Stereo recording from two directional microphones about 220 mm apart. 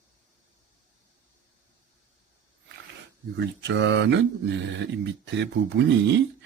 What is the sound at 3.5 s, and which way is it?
Speech, 55° right (ahead or behind).